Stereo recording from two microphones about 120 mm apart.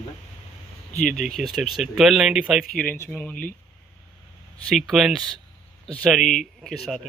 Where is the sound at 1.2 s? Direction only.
Centre (ahead or behind).